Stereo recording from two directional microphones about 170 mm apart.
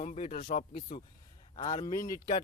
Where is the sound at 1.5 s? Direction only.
20° left (ahead or behind).